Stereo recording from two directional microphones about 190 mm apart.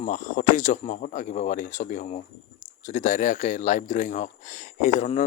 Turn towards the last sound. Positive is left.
turn(degrees=40)  # may be behind; listen again after turning